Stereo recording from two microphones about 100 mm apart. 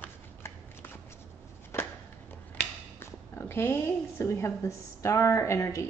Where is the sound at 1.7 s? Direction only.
25° left (ahead or behind).